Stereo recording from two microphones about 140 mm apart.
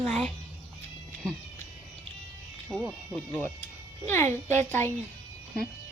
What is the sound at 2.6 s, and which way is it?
Speech, 5° right (ahead or behind).